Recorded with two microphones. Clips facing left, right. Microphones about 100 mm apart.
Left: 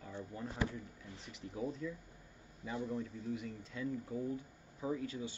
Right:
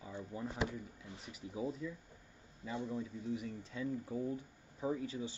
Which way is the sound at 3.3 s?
15° right (ahead or behind).